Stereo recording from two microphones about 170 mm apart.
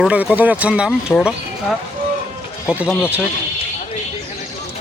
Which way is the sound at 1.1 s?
20° left (ahead or behind).